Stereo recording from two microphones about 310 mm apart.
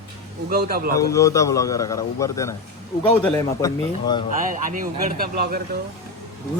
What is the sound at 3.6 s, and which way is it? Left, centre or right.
Speech, centre.